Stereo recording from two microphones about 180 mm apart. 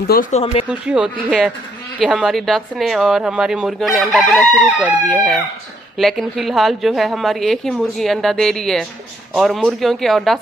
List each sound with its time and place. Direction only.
0.3 s speech: 35° left (ahead or behind)
0.7 s speech: 5° right (ahead or behind)